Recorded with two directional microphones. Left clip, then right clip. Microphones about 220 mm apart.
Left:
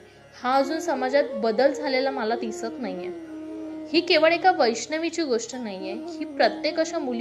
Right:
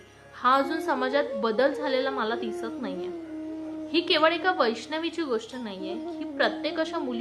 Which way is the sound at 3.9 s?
Centre (ahead or behind).